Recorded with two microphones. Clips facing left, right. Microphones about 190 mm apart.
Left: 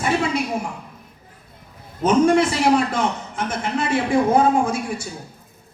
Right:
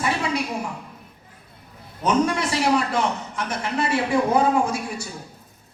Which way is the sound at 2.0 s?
50° left (ahead or behind).